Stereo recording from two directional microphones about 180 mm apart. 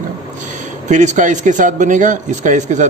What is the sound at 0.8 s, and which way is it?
Speech, 40° right (ahead or behind).